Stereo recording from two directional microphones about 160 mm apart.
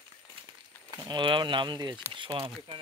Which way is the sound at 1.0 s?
30° right (ahead or behind).